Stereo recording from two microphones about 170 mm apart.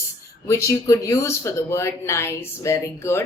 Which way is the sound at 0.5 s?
20° left (ahead or behind).